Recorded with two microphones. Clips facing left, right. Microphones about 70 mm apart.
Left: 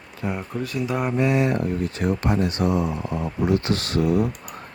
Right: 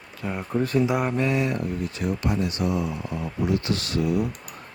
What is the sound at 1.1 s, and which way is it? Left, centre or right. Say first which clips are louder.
Speech: left 3 dB; centre.